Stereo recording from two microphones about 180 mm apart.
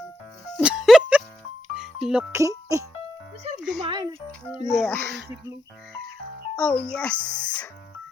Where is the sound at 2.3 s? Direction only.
15° right (ahead or behind).